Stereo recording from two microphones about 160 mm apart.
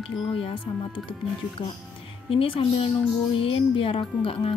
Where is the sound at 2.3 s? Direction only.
35° left (ahead or behind).